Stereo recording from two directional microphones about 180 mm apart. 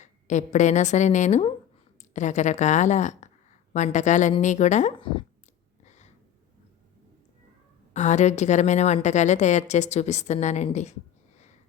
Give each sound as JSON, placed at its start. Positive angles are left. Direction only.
{"t": 0.0, "sound": "a woman's voice", "side_deg": 40}
{"t": 5.8, "sound": "a sound", "side_deg": 40}
{"t": 7.9, "sound": "a woman's voice", "side_deg": 40}